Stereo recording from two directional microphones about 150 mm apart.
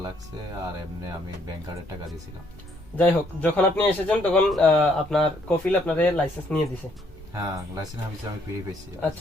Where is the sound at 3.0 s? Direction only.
10° left (ahead or behind).